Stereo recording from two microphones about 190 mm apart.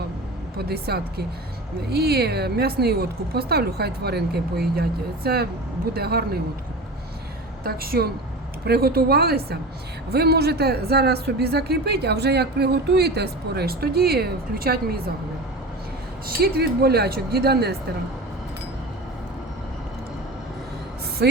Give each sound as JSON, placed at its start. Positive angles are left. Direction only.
{"t": 0.5, "sound": "speech", "side_deg": -55}
{"t": 7.6, "sound": "a woman's voice", "side_deg": -50}
{"t": 16.2, "sound": "speech", "side_deg": -50}
{"t": 21.2, "sound": "a sound", "side_deg": -60}